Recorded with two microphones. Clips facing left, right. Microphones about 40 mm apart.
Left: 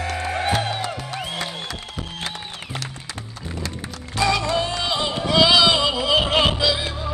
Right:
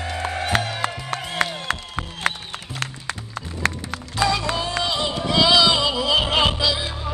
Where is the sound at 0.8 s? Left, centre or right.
Right.